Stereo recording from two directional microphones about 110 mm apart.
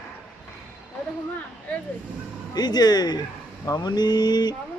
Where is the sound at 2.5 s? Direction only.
40° left (ahead or behind).